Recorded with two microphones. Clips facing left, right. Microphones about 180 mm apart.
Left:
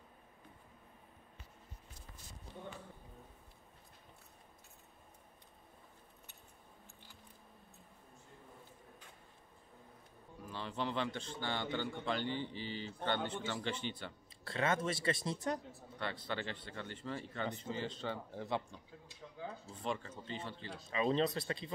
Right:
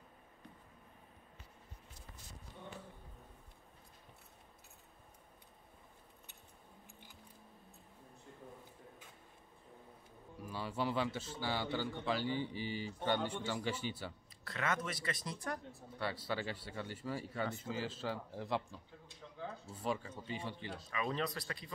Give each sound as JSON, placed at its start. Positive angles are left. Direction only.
{"t": 10.4, "sound": "a man's voice", "side_deg": -10}
{"t": 14.4, "sound": "speech", "side_deg": 30}
{"t": 16.0, "sound": "speech", "side_deg": -10}
{"t": 20.9, "sound": "speech", "side_deg": 25}